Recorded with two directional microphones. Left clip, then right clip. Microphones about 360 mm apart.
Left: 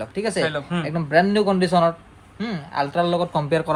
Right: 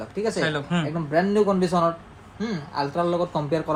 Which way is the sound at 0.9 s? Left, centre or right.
Left.